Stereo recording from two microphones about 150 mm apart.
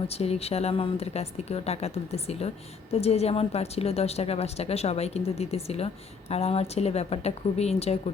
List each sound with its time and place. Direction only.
0.1 s a woman's voice: 45° left (ahead or behind)